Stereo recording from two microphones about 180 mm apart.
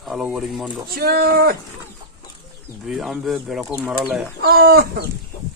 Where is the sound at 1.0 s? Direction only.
55° right (ahead or behind).